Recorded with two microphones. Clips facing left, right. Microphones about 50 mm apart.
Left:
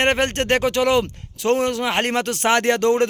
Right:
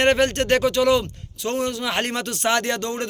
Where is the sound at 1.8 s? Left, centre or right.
Left.